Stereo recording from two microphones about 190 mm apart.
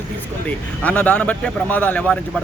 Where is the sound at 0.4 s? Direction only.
5° left (ahead or behind).